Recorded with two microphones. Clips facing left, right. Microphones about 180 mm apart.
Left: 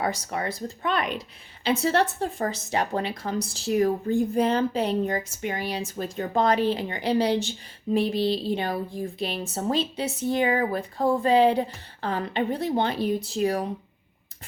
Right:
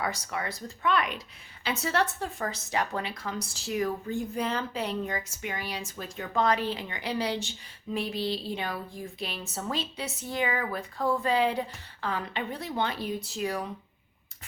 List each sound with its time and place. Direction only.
0.0 s speech: 35° left (ahead or behind)